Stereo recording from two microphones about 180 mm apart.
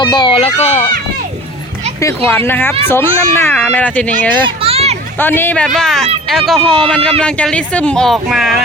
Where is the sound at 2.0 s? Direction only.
15° left (ahead or behind).